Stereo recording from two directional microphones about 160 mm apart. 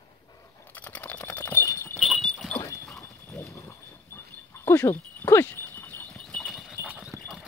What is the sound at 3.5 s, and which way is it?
Dog, 20° left (ahead or behind).